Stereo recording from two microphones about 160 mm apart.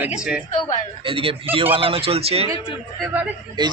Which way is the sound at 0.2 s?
5° right (ahead or behind).